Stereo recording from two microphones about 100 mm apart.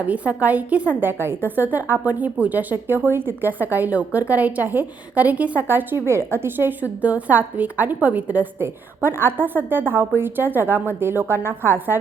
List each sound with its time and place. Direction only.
0.0 s a woman's voice: 15° right (ahead or behind)